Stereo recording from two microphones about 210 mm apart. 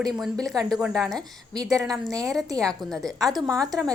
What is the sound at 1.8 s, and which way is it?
Speech, centre (ahead or behind).